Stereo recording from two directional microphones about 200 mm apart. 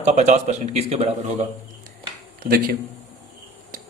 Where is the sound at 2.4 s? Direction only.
50° right (ahead or behind).